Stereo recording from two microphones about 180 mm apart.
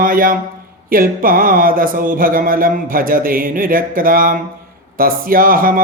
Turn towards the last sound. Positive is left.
turn(degrees=-50)  # may be behind; listen again after turning